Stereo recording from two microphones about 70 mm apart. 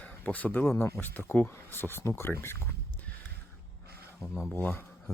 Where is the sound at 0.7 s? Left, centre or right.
Left.